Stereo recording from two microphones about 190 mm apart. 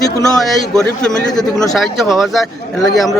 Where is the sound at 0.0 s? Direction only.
20° left (ahead or behind).